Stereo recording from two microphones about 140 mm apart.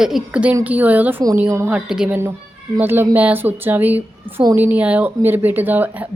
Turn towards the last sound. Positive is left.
turn(degrees=-15)  # may be behind; listen again after turning